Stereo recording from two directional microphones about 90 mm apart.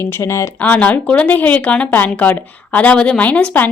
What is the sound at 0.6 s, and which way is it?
Speech, 20° left (ahead or behind).